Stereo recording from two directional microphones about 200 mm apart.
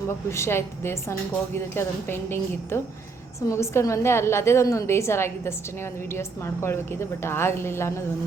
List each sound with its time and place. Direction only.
0.3 s a woman's voice: 15° left (ahead or behind)